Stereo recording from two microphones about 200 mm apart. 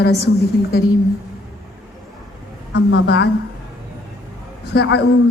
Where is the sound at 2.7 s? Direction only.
60° left (ahead or behind).